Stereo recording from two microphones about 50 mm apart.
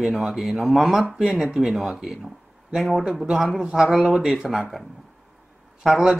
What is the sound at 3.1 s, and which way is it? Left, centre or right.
Speech, centre.